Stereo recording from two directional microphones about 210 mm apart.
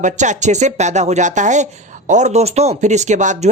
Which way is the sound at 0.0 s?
35° right (ahead or behind).